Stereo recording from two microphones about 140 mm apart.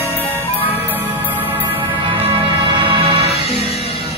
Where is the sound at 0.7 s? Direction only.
15° right (ahead or behind).